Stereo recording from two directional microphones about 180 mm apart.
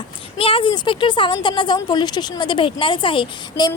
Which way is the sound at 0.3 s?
30° left (ahead or behind).